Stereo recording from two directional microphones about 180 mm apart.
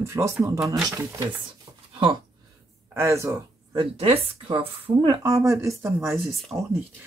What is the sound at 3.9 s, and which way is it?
A woman's voice, 35° right (ahead or behind).